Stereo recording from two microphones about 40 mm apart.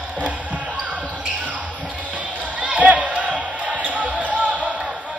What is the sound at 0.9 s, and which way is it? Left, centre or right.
Basketball bounce, right.